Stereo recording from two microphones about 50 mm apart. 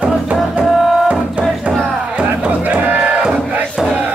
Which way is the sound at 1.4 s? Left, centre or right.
Right.